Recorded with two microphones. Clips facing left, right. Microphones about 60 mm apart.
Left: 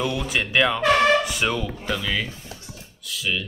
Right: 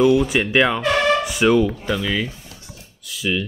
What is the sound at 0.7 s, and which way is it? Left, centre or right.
Music, centre.